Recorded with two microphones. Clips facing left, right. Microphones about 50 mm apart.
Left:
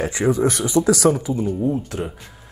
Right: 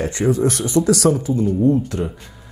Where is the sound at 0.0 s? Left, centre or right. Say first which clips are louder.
Right 1 dB; centre.